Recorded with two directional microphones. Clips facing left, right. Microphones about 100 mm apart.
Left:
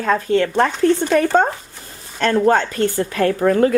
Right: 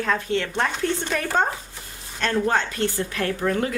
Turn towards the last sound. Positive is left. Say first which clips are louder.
# left 9 dB
turn(degrees=45)  # may be behind; listen again after turning